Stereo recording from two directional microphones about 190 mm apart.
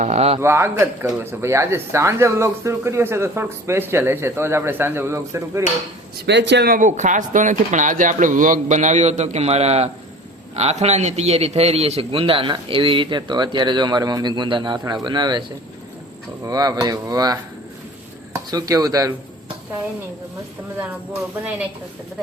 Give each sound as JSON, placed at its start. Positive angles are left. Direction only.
{"t": 0.0, "sound": "speech", "side_deg": -35}
{"t": 0.3, "sound": "speech", "side_deg": -15}
{"t": 6.2, "sound": "a man's voice", "side_deg": -65}
{"t": 16.5, "sound": "a man's voice", "side_deg": -20}
{"t": 18.3, "sound": "speech", "side_deg": -15}